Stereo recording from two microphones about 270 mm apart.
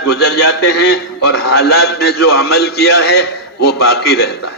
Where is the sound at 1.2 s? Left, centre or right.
Left.